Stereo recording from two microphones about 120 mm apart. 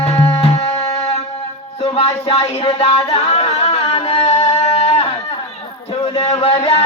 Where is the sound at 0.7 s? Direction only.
30° left (ahead or behind).